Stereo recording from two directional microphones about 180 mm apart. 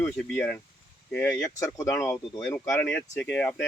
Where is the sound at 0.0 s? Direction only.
5° left (ahead or behind).